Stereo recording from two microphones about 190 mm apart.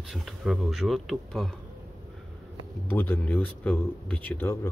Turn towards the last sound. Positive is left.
turn(degrees=10)  # may be behind; listen again after turning